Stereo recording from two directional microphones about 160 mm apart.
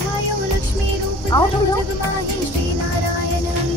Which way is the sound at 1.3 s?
30° left (ahead or behind).